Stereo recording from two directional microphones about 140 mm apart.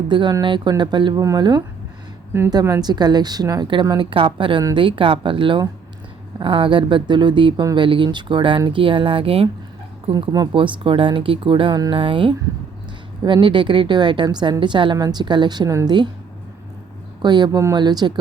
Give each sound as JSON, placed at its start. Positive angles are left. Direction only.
{"t": 0.1, "sound": "speech", "side_deg": -35}
{"t": 10.1, "sound": "speech", "side_deg": -30}
{"t": 17.2, "sound": "speech", "side_deg": -30}